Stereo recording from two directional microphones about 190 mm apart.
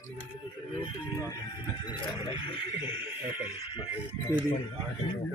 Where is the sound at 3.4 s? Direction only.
30° left (ahead or behind).